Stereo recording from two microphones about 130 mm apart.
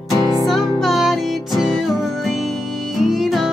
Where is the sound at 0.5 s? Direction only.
Centre (ahead or behind).